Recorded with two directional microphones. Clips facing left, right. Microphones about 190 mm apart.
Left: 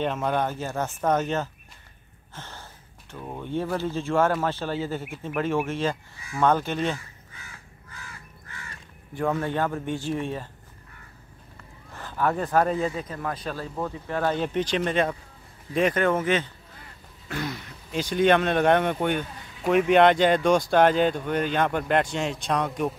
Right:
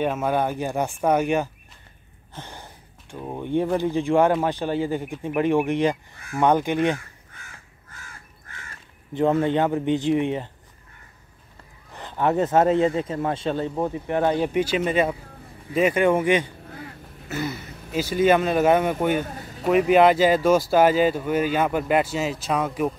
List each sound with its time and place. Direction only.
0.0 s speech: 10° right (ahead or behind)
6.1 s speech: 55° right (ahead or behind)
6.4 s speech: 15° right (ahead or behind)
9.1 s speech: 20° right (ahead or behind)
11.9 s speech: 20° right (ahead or behind)
16.6 s honk: 60° right (ahead or behind)
17.3 s speech: 5° right (ahead or behind)
19.2 s vehicle: 45° right (ahead or behind)
19.9 s speech: 5° right (ahead or behind)